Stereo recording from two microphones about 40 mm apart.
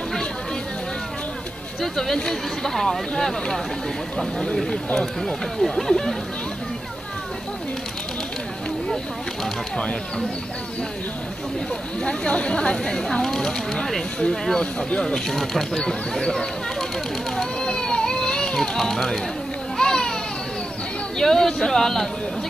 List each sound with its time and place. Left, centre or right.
2.0 s speech: centre
4.9 s speech: centre
9.8 s speech: left
12.0 s speech: left
12.7 s speech: centre
15.2 s speech: centre
15.8 s speech: centre
17.6 s baby cry: centre
19.8 s baby cry: centre
21.2 s speech: centre